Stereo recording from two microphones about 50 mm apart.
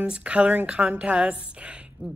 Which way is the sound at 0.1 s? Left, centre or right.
Right.